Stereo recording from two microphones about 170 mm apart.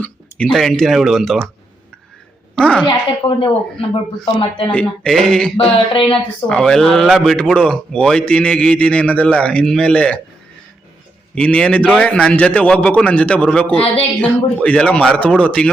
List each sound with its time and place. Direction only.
0.0 s speech: 5° left (ahead or behind)
2.6 s speech: 5° left (ahead or behind)
2.8 s speech: 30° left (ahead or behind)
4.7 s speech: 5° left (ahead or behind)
5.9 s speech: 30° left (ahead or behind)
6.5 s speech: 5° left (ahead or behind)
11.3 s a man's voice: 5° left (ahead or behind)